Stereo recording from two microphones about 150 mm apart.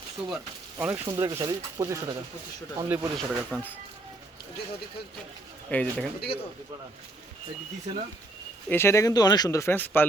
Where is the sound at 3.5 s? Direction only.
10° left (ahead or behind).